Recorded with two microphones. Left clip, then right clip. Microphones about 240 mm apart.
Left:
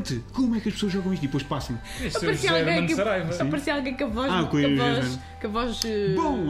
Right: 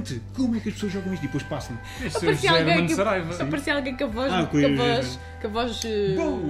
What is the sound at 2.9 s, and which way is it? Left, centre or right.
Speech, right.